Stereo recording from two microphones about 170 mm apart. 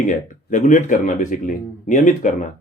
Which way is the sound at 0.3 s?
50° left (ahead or behind).